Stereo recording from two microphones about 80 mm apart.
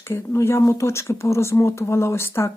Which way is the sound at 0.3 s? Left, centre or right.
Left.